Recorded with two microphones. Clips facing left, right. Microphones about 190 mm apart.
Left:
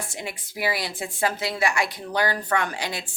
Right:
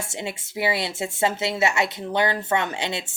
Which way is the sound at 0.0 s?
25° right (ahead or behind).